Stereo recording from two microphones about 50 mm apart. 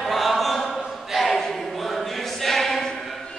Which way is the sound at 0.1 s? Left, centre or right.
Centre.